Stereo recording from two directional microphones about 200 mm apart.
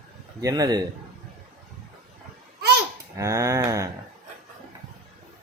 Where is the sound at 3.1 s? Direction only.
15° right (ahead or behind).